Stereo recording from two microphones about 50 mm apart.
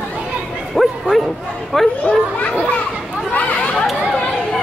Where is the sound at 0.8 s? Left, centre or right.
Centre.